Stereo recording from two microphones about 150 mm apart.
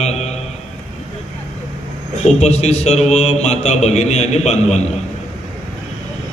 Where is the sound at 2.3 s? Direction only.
45° left (ahead or behind).